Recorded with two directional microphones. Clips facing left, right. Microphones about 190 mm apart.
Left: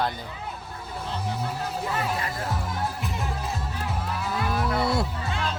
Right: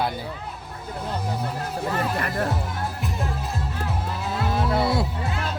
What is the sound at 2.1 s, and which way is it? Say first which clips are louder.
Music: right 5 dB; 65° right (ahead or behind).